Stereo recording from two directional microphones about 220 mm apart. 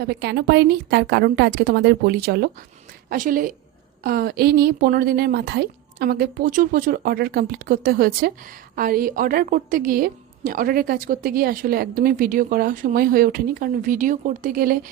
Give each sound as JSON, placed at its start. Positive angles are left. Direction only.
{"t": 0.0, "sound": "a woman's voice", "side_deg": -50}